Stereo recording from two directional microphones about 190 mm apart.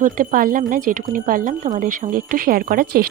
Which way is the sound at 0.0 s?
45° right (ahead or behind).